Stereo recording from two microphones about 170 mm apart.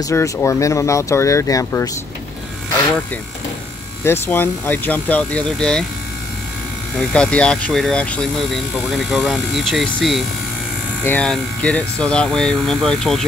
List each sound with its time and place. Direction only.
0.0 s speech: 15° left (ahead or behind)
4.0 s speech: 15° left (ahead or behind)
7.0 s speech: 5° left (ahead or behind)